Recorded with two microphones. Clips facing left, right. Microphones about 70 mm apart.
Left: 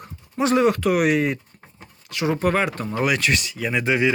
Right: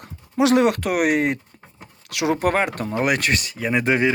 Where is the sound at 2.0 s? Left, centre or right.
Right.